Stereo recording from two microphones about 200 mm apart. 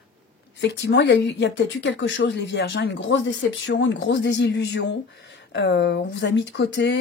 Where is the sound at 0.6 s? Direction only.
60° left (ahead or behind).